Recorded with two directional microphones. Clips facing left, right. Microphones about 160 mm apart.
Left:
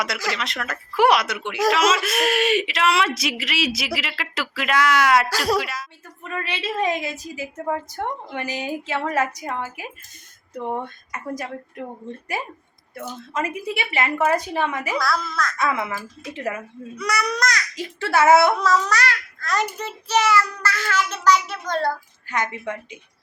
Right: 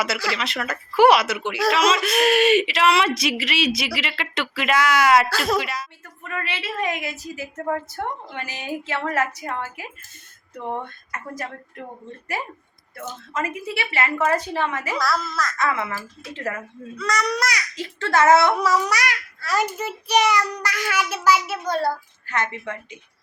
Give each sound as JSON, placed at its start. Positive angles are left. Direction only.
{"t": 0.3, "sound": "speech", "side_deg": 0}
{"t": 6.2, "sound": "a woman's voice", "side_deg": 15}
{"t": 13.0, "sound": "a woman's voice", "side_deg": 15}
{"t": 14.9, "sound": "speech", "side_deg": 0}
{"t": 15.5, "sound": "a woman's voice", "side_deg": 15}
{"t": 17.3, "sound": "a child's voice", "side_deg": -10}
{"t": 17.7, "sound": "a woman's voice", "side_deg": 10}
{"t": 18.5, "sound": "a child's voice", "side_deg": -10}
{"t": 22.3, "sound": "a woman's voice", "side_deg": 15}